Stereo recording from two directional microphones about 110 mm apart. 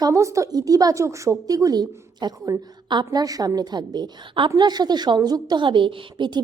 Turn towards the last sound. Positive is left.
turn(degrees=-45)  # may be behind; listen again after turning